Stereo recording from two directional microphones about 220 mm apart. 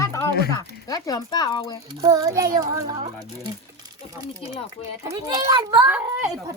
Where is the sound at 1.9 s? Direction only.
15° right (ahead or behind).